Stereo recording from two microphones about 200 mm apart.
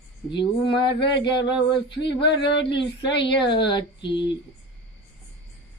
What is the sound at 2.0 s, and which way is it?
Speech, 60° left (ahead or behind).